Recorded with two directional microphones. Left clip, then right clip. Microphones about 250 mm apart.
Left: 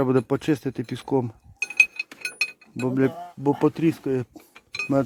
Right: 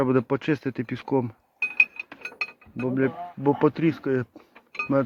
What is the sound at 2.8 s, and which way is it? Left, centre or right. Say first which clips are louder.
Speech: left 2 dB; left.